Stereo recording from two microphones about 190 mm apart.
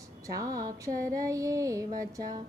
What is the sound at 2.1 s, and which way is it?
Speech, 20° right (ahead or behind).